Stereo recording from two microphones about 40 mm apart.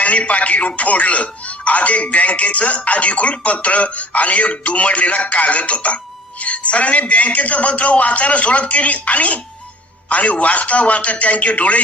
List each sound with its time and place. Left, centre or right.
0.0 s speech: left